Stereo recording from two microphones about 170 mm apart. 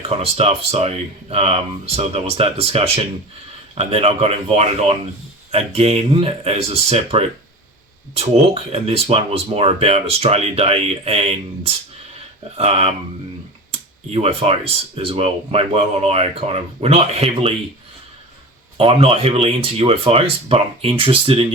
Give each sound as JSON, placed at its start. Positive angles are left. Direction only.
{"t": 0.2, "sound": "speech", "side_deg": -40}
{"t": 13.7, "sound": "a sound", "side_deg": -35}
{"t": 14.9, "sound": "speech", "side_deg": -35}
{"t": 18.8, "sound": "speech", "side_deg": -35}